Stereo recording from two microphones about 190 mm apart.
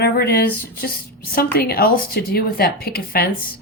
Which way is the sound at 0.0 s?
55° left (ahead or behind).